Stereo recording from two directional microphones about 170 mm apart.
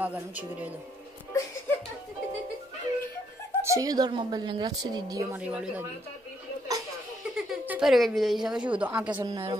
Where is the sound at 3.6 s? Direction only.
20° right (ahead or behind).